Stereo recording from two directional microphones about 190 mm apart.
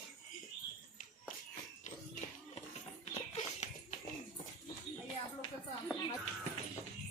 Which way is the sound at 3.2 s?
35° left (ahead or behind).